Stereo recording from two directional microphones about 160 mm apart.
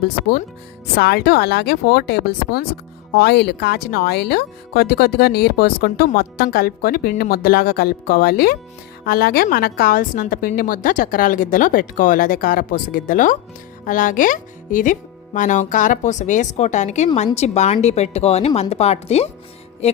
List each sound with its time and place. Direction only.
0.9 s speech: 85° left
3.2 s a woman's voice: 90° left; by 19.3 s 40° left (ahead or behind)